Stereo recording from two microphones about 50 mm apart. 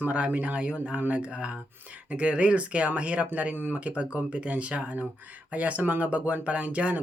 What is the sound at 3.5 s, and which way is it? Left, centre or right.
Speech, right.